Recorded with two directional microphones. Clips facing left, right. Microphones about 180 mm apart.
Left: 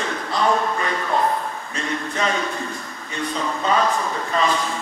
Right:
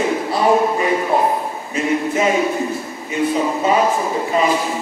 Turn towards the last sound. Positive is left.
turn(degrees=-10)  # may be behind; listen again after turning